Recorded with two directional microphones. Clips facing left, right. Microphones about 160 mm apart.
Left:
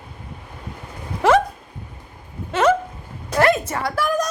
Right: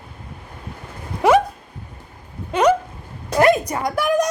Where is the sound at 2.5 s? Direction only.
15° right (ahead or behind).